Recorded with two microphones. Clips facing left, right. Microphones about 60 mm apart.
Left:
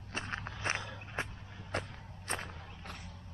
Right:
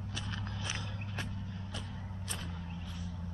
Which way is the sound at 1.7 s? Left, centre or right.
Left.